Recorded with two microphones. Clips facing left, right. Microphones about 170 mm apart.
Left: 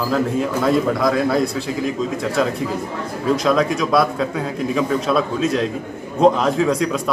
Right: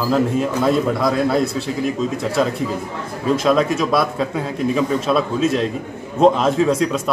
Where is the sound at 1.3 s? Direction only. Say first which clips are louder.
Even; 25° right (ahead or behind).